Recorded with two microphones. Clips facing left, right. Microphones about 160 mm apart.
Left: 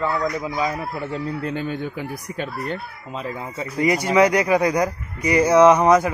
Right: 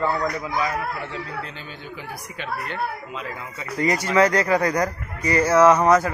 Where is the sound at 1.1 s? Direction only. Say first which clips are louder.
Left 7 dB; 50° left (ahead or behind).